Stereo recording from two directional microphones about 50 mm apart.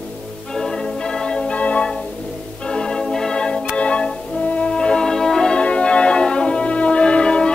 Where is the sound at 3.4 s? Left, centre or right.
Left.